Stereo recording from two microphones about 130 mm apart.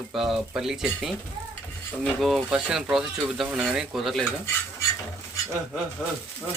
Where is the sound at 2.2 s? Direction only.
5° right (ahead or behind).